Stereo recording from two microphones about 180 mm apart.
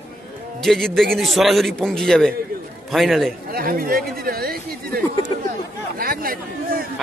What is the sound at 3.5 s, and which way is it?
Speech, 55° right (ahead or behind).